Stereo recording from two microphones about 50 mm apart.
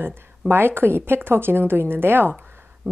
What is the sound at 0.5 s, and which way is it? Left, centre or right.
A woman's voice, right.